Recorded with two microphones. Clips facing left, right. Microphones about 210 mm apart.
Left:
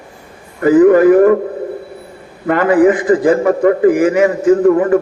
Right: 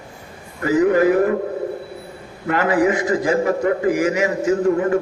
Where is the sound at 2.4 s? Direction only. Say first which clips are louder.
Left 7 dB; 55° left (ahead or behind).